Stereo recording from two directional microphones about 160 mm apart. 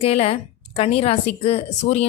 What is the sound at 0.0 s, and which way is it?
Speech, 40° left (ahead or behind).